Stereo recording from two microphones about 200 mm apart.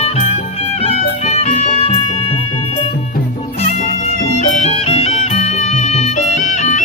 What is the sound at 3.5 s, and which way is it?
Music, 35° left (ahead or behind).